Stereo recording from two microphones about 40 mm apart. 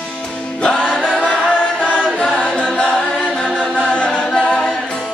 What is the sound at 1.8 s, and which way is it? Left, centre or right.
Chant, left.